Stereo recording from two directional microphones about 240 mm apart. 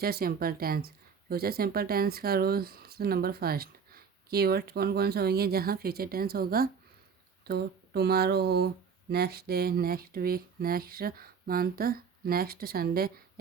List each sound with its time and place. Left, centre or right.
0.0 s speech: right